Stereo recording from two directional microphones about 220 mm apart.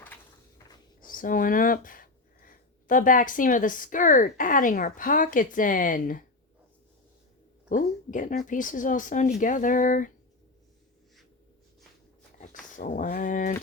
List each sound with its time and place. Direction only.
1.0 s speech: 40° left (ahead or behind)
7.7 s speech: 35° left (ahead or behind)
12.4 s speech: 35° left (ahead or behind)